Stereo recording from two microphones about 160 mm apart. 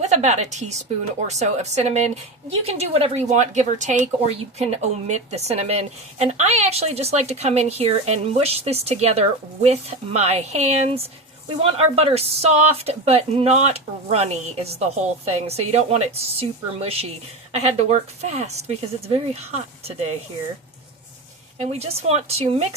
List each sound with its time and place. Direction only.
0.0 s a woman's voice: 45° right (ahead or behind)
21.6 s a woman's voice: 40° right (ahead or behind)